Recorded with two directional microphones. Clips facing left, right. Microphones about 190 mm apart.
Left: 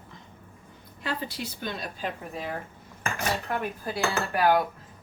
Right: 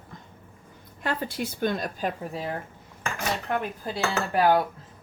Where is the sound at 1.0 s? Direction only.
50° right (ahead or behind).